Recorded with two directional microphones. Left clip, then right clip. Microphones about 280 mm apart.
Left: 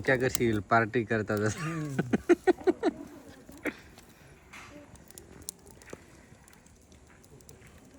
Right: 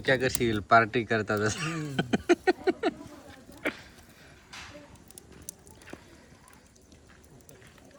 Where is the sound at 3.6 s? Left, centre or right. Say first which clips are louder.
Right 3 dB; centre.